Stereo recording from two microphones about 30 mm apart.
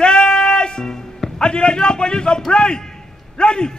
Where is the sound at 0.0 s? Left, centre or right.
Left.